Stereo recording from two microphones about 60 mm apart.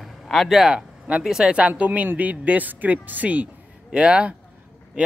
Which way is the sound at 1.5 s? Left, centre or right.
Right.